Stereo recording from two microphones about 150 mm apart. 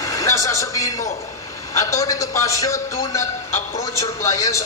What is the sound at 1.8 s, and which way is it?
A man's voice, 20° left (ahead or behind).